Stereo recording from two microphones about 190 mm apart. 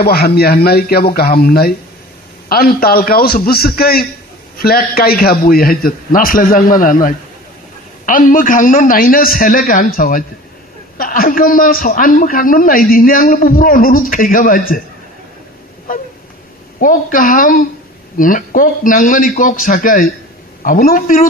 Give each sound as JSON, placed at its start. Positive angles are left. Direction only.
{"t": 0.0, "sound": "a man's voice", "side_deg": 55}
{"t": 16.8, "sound": "a man's voice", "side_deg": 45}